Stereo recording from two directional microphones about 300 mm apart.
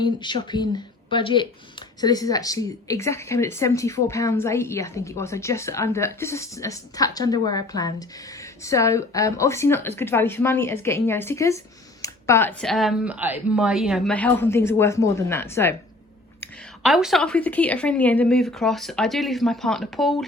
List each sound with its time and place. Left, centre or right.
0.0 s a woman's voice: centre